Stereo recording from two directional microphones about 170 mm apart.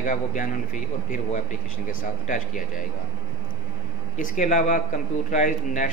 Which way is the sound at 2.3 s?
50° left (ahead or behind).